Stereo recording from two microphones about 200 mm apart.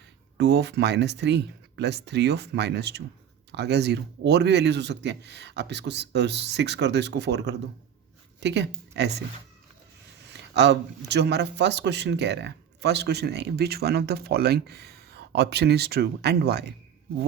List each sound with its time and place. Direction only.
0.3 s a man's voice: 55° right (ahead or behind)
10.3 s a man's voice: 60° right (ahead or behind)